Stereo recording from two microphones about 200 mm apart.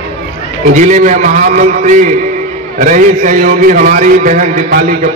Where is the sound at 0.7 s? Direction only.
35° right (ahead or behind).